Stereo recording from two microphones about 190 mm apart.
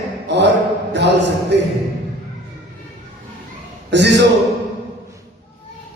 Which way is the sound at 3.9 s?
65° right (ahead or behind).